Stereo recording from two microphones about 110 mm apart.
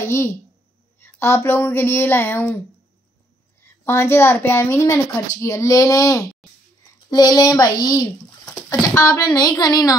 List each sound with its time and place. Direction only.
0.0 s a woman's voice: 25° left (ahead or behind)
3.6 s a woman's voice: 25° left (ahead or behind)